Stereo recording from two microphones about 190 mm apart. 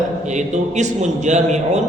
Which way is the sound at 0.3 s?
40° right (ahead or behind).